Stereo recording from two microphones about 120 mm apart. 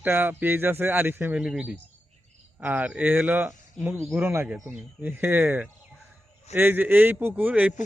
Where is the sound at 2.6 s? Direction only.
15° right (ahead or behind).